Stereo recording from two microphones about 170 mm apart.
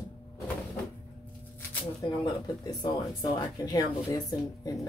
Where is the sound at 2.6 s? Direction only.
25° left (ahead or behind).